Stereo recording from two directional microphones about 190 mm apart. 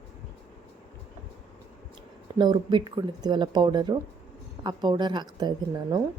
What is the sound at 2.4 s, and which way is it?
A woman's voice, 25° right (ahead or behind).